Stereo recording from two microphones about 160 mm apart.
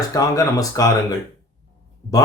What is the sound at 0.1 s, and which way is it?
Speech, 20° left (ahead or behind).